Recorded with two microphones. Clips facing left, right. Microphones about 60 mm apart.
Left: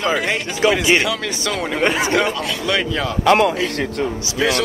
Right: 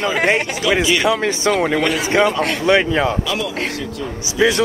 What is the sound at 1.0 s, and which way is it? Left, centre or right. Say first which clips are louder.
Speech: right 5 dB; right.